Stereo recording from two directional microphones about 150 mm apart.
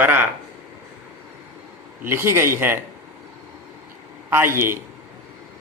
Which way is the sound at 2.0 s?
15° right (ahead or behind).